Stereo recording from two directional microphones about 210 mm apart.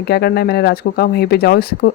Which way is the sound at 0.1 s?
50° left (ahead or behind).